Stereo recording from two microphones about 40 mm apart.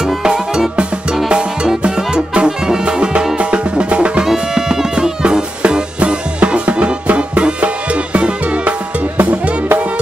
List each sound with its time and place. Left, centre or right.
0.0 s music: centre
4.2 s music: centre